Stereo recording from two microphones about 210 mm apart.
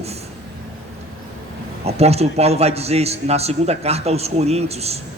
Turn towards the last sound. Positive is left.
turn(degrees=-30)  # may be behind; listen again after turning